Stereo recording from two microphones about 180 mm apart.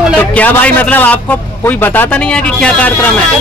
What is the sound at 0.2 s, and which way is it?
A man's voice, 10° left (ahead or behind).